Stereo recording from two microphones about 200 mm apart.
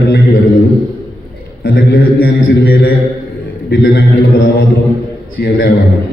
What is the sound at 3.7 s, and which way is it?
Speech, 55° left (ahead or behind).